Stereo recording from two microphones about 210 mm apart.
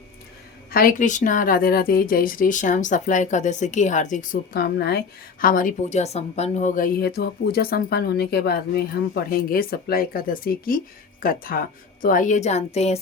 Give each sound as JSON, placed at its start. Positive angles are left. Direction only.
{"t": 0.7, "sound": "speech", "side_deg": 40}